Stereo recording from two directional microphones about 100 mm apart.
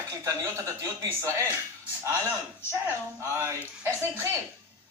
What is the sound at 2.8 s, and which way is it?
A woman's voice, 25° right (ahead or behind).